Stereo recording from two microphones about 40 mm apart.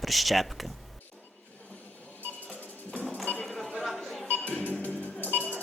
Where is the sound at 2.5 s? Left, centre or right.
Left.